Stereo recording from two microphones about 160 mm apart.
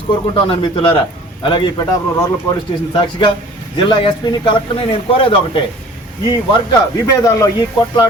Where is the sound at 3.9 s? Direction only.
30° left (ahead or behind).